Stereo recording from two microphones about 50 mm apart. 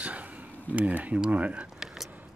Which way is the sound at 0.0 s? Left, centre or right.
Right.